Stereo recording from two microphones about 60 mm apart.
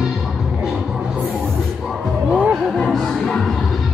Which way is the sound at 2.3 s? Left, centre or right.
Right.